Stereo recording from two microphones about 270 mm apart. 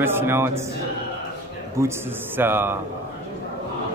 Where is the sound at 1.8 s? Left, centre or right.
Centre.